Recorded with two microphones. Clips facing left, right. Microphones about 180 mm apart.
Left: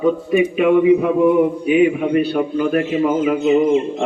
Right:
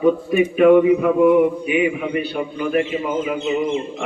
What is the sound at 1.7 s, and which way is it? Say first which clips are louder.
Speech: left 8 dB; 40° left (ahead or behind).